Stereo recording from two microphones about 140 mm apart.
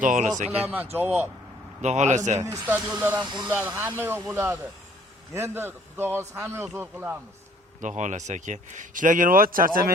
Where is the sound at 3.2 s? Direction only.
30° right (ahead or behind).